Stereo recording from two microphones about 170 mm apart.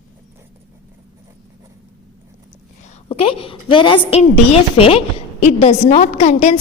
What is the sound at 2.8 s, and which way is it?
A woman's voice, 35° left (ahead or behind).